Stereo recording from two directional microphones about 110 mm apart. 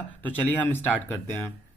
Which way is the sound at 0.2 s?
15° left (ahead or behind).